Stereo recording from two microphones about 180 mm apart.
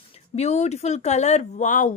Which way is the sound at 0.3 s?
35° left (ahead or behind).